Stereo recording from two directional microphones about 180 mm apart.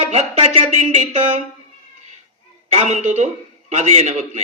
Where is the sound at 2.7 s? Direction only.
35° right (ahead or behind).